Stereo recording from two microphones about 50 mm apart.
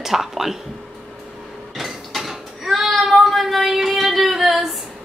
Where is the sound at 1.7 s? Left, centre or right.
Centre.